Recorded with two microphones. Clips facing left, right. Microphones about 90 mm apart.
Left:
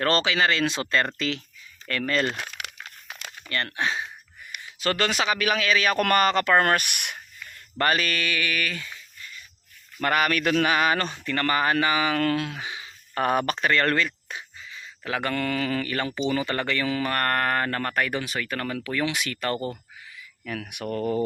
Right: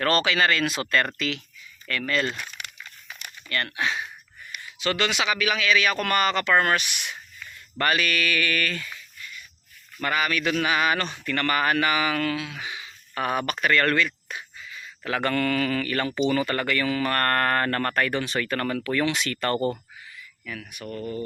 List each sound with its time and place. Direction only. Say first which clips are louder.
0.0 s speech: even; 25° left (ahead or behind)
2.4 s crumpling: left 2 dB; 90° left
2.8 s a sound: left 2 dB; 85° left
3.5 s speech: even; 30° left (ahead or behind)
4.8 s speech: left 1 dB; 40° left (ahead or behind); by 7.2 s 60° left (ahead or behind)
7.8 s speech: even; 35° left (ahead or behind); by 8.9 s 15° left (ahead or behind)
8.9 s a sound: right 1 dB; 35° left (ahead or behind)
10.0 s speech: left 2 dB; 50° left (ahead or behind); by 12.2 s 30° left (ahead or behind)
12.2 s speech: left 3 dB; 45° left (ahead or behind)
12.5 s a sound: even; 30° left (ahead or behind)
15.1 s speech: right 2 dB; 15° left (ahead or behind)
20.6 s speech: left 6 dB; 70° left (ahead or behind); by 21.2 s 90° left